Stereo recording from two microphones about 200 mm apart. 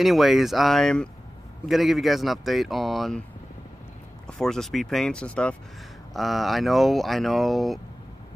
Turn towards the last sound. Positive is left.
turn(degrees=0)  # may be behind; listen again after turning